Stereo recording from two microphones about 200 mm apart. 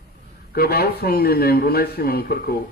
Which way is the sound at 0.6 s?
50° left (ahead or behind).